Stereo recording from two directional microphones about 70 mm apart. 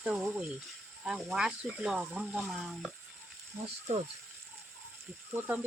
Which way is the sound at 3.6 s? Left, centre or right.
Right.